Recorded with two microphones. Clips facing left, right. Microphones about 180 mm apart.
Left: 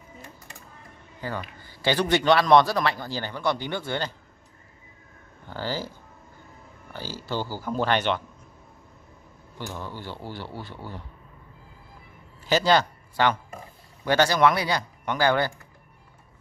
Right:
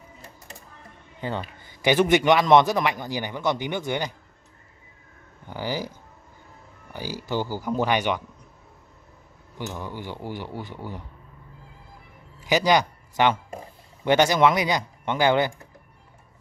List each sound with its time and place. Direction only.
1.2 s a man's voice: 20° right (ahead or behind)
5.5 s a man's voice: 15° right (ahead or behind)
9.7 s a man's voice: 15° right (ahead or behind)
12.4 s a man's voice: 15° right (ahead or behind)